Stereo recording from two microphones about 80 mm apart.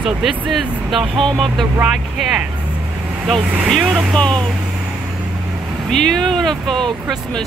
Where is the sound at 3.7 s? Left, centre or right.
Centre.